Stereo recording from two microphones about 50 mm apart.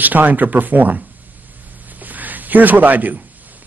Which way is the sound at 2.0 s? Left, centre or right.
Right.